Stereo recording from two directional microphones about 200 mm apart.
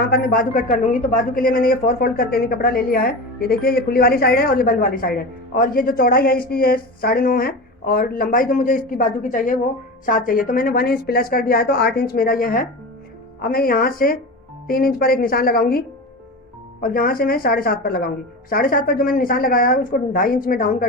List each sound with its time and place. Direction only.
0.0 s a woman's voice: 50° left (ahead or behind)
16.8 s a woman's voice: 45° left (ahead or behind)